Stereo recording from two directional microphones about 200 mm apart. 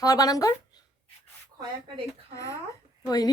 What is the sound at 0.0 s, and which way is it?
Speech, 20° left (ahead or behind).